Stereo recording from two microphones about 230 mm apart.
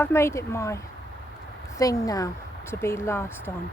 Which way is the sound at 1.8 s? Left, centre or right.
Centre.